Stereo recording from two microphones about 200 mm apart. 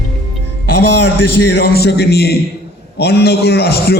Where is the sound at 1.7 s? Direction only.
55° left (ahead or behind).